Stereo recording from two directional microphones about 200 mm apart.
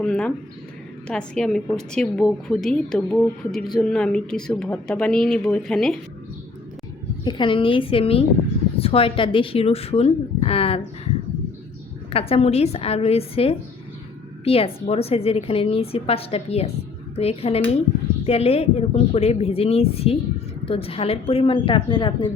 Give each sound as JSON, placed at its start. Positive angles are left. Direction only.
{"t": 0.0, "sound": "a sound", "side_deg": 5}
{"t": 1.0, "sound": "a woman's voice", "side_deg": 5}
{"t": 7.3, "sound": "a woman's voice", "side_deg": 25}
{"t": 12.1, "sound": "a woman's voice", "side_deg": 30}